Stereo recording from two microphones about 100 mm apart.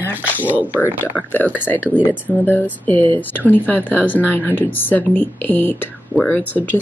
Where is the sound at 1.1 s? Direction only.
15° left (ahead or behind).